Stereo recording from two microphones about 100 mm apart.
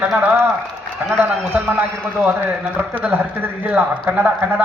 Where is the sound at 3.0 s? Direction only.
15° right (ahead or behind).